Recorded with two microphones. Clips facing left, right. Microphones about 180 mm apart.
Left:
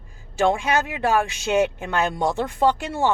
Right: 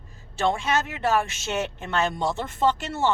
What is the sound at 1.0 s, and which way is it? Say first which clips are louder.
Speech: left 3 dB; 15° left (ahead or behind).